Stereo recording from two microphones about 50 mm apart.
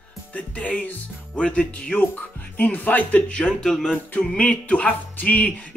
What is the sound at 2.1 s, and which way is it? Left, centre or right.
Speech, left.